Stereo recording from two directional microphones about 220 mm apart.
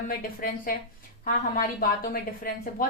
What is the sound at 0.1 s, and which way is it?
A woman's voice, 40° left (ahead or behind).